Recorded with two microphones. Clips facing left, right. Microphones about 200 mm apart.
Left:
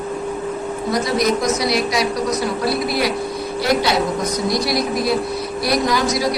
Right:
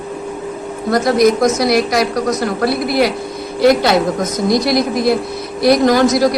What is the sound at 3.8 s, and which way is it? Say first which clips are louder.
Speech: right 4 dB; 50° right (ahead or behind).